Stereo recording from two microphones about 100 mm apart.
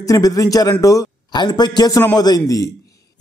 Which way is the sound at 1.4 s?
45° left (ahead or behind).